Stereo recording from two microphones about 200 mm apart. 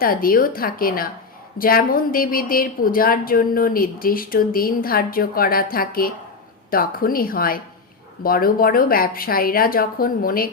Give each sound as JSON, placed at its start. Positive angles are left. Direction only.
{"t": 0.0, "sound": "a woman's voice", "side_deg": 45}